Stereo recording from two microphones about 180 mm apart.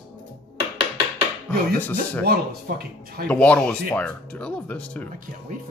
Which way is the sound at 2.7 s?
55° right (ahead or behind).